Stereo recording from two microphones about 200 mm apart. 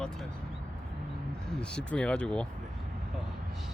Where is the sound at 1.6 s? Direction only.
5° left (ahead or behind).